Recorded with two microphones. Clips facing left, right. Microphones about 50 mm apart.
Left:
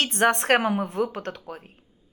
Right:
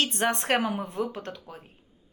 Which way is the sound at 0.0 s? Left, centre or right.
Left.